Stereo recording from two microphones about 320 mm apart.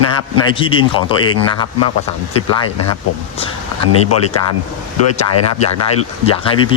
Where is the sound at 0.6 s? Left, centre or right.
Centre.